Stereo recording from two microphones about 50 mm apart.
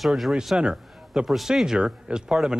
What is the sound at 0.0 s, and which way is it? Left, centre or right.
Speech, centre.